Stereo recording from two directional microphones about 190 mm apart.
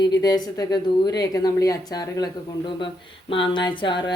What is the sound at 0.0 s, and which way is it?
A woman's voice, 20° left (ahead or behind).